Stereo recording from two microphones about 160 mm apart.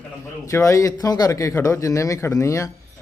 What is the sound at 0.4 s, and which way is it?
Speech, 20° left (ahead or behind).